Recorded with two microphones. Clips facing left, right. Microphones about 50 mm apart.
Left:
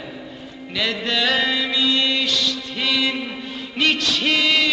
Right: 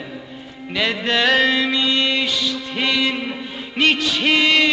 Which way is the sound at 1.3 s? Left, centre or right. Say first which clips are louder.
Right 4 dB; centre.